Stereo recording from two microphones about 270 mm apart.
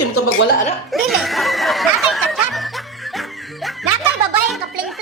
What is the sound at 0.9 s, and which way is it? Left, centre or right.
Snicker, centre.